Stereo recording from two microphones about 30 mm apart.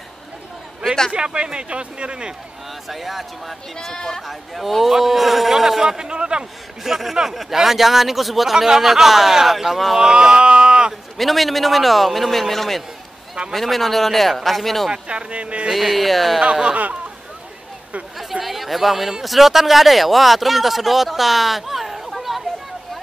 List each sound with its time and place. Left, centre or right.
1.1 s speech: right
2.9 s speech: centre
3.8 s speech: left
4.2 s speech: centre
6.0 s speech: right
6.8 s speech: centre
9.9 s speech: right
10.5 s a sound: right
11.1 s speech: centre
14.9 s speech: right
15.7 s speech: centre
18.4 s chatter: centre
19.2 s speech: centre